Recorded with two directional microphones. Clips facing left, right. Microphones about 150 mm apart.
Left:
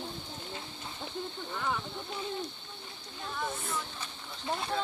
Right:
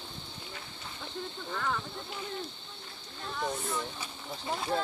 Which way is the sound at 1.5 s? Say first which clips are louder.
Right 1 dB; 10° left (ahead or behind).